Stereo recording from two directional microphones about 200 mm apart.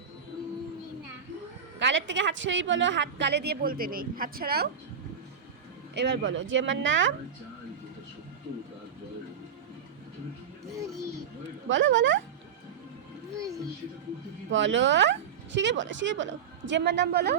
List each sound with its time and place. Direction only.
1.8 s a woman's voice: 65° right (ahead or behind); by 4.7 s 50° right (ahead or behind)
5.9 s a woman's voice: 60° right (ahead or behind)
10.7 s a sound: 15° right (ahead or behind)
11.7 s speech: 65° right (ahead or behind)
14.5 s a woman's voice: 65° right (ahead or behind)